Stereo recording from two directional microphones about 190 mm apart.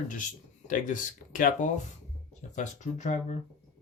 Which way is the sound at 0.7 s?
45° left (ahead or behind).